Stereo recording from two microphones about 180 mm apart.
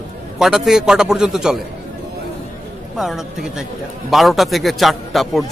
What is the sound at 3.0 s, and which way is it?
A man's voice, centre (ahead or behind).